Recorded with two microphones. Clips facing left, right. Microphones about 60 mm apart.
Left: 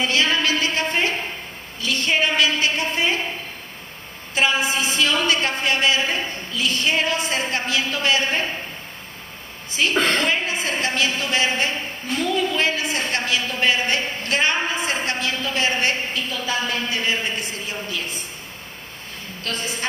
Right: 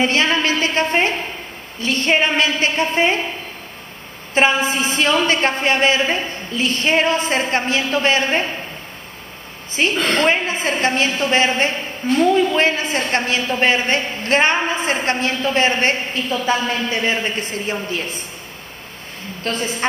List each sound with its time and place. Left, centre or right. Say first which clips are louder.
0.0 s a sound: right 3 dB; right
1.8 s a woman's voice: right 4 dB; right
4.3 s a woman's voice: right 4 dB; right
9.8 s a woman's voice: right 2 dB; right
19.4 s a woman's voice: right 6 dB; right